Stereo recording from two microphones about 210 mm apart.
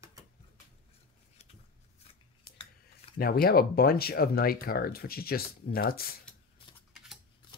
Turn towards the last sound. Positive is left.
turn(degrees=45)  # may be behind; listen again after turning